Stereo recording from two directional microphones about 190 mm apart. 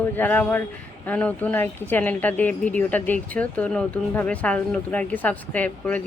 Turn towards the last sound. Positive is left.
turn(degrees=10)  # may be behind; listen again after turning